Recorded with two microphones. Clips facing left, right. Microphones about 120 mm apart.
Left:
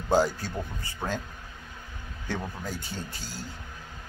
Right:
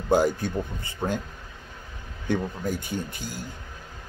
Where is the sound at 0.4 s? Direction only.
55° right (ahead or behind).